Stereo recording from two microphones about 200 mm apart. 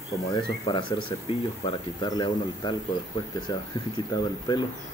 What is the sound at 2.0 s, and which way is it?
Speech, 20° left (ahead or behind).